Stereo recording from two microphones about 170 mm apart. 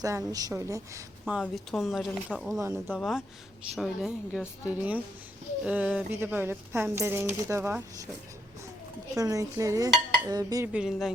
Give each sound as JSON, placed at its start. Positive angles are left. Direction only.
{"t": 0.0, "sound": "dishes", "side_deg": -20}
{"t": 1.2, "sound": "speech", "side_deg": 0}
{"t": 9.1, "sound": "dishes", "side_deg": -20}
{"t": 10.7, "sound": "speech", "side_deg": -5}